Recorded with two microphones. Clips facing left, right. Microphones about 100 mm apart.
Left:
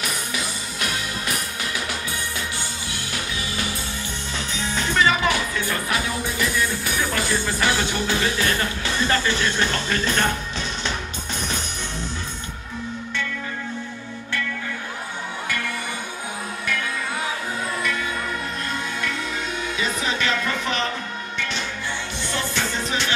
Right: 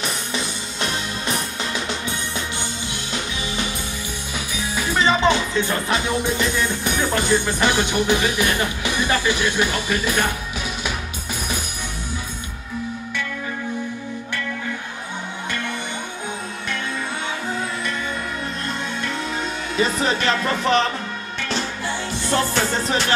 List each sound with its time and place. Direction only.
0.0 s music: 30° right (ahead or behind)
2.9 s music: 20° right (ahead or behind)
4.6 s music: 10° right (ahead or behind)
4.9 s music: 25° right (ahead or behind)
19.8 s speech: 40° right (ahead or behind)
22.3 s speech: 40° right (ahead or behind)